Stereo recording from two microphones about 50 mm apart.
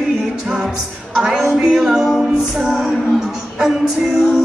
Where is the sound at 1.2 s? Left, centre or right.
Centre.